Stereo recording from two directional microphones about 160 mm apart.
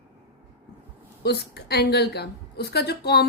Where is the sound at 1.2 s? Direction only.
90° left.